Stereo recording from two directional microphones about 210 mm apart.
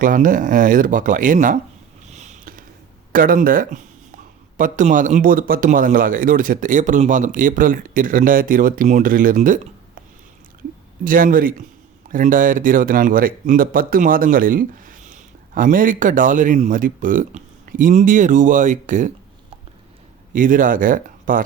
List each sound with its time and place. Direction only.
0.0 s speech: 40° right (ahead or behind)
2.0 s a sound: 35° right (ahead or behind)
3.1 s speech: 40° right (ahead or behind)
11.0 s speech: 40° right (ahead or behind)
20.3 s speech: 40° right (ahead or behind)